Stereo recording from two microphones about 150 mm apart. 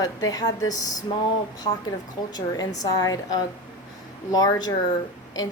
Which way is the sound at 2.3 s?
25° left (ahead or behind).